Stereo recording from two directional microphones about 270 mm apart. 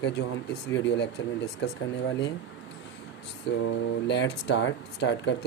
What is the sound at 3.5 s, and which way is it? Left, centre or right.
Speech, left.